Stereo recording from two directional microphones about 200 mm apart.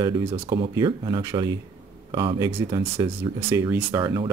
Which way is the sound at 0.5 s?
25° right (ahead or behind).